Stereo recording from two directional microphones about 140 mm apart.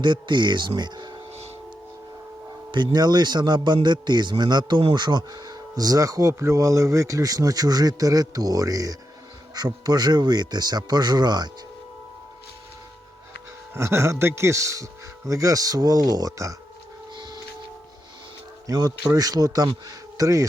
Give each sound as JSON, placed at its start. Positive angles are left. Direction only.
{"t": 0.0, "sound": "speech", "side_deg": -35}
{"t": 0.8, "sound": "a sound", "side_deg": -30}
{"t": 2.7, "sound": "speech", "side_deg": -30}
{"t": 13.7, "sound": "speech", "side_deg": -20}
{"t": 17.2, "sound": "printer", "side_deg": -30}
{"t": 18.7, "sound": "speech", "side_deg": -25}